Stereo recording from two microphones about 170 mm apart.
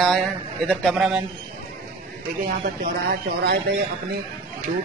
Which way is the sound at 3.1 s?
65° right (ahead or behind).